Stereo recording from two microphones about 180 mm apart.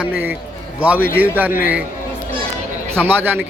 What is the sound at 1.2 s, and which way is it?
Speech, 10° right (ahead or behind).